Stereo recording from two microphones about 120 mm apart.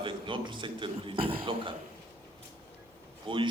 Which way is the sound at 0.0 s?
45° right (ahead or behind).